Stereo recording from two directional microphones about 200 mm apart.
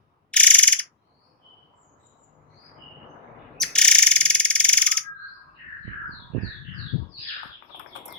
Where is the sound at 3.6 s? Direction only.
5° left (ahead or behind).